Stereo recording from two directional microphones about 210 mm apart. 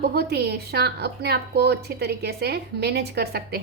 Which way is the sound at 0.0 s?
50° right (ahead or behind).